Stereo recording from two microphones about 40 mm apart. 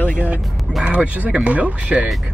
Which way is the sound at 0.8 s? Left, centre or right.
Right.